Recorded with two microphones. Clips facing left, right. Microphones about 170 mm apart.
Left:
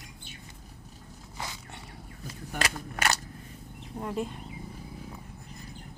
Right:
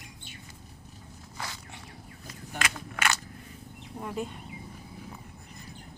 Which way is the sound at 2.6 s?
35° left (ahead or behind).